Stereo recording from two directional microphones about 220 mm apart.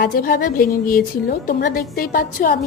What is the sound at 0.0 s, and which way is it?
A woman's voice, 45° left (ahead or behind).